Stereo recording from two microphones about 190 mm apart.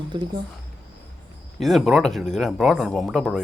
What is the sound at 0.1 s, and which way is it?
Speech, 25° right (ahead or behind).